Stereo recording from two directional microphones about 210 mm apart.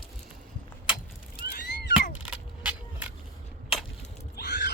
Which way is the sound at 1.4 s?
40° left (ahead or behind).